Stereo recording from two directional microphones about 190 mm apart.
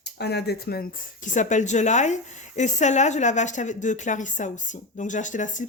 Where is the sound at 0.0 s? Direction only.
60° left (ahead or behind).